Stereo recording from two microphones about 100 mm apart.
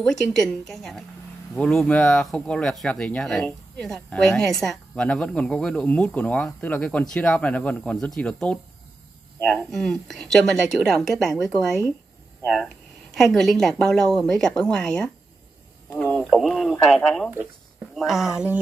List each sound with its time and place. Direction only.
0.0 s speech: 5° left (ahead or behind)
16.3 s speech: centre (ahead or behind)